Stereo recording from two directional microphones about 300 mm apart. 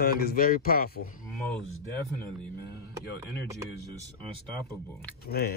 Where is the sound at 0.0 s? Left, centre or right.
Left.